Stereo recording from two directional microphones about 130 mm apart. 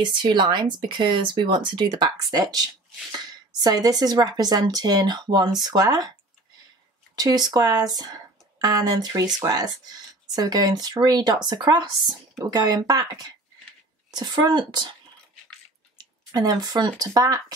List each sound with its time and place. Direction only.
0.1 s speech: 35° right (ahead or behind)
7.2 s speech: 30° right (ahead or behind)
16.0 s speech: 30° right (ahead or behind)